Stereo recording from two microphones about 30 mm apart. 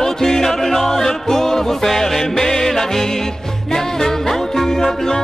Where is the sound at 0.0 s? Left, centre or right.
Centre.